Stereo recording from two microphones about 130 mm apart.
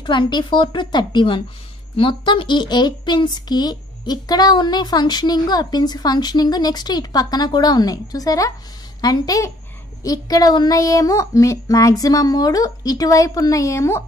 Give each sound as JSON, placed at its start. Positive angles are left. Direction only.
{"t": 0.0, "sound": "speech", "side_deg": 35}